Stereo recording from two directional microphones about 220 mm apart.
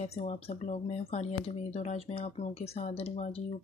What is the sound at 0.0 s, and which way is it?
Speech, 30° left (ahead or behind).